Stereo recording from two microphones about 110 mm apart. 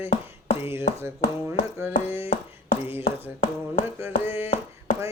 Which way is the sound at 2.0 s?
25° right (ahead or behind).